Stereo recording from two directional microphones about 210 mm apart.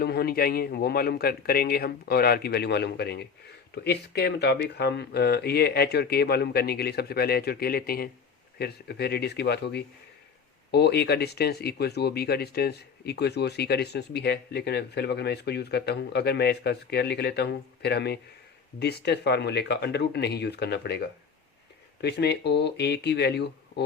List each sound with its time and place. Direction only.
0.0 s speech: 50° left (ahead or behind)